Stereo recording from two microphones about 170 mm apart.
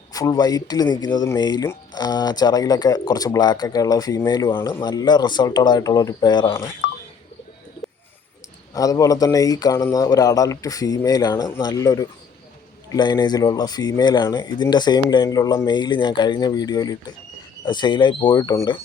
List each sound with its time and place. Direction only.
0.1 s speech: 20° left (ahead or behind)
8.7 s speech: 20° left (ahead or behind)